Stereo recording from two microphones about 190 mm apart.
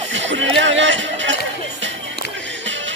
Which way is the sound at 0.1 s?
75° right (ahead or behind).